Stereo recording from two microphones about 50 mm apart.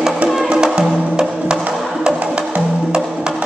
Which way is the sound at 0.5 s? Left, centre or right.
Centre.